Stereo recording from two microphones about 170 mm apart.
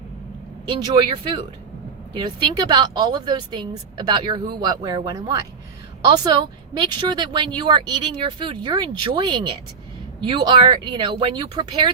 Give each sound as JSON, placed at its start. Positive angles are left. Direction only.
{"t": 0.7, "sound": "a woman's voice", "side_deg": -25}
{"t": 6.7, "sound": "a woman's voice", "side_deg": -25}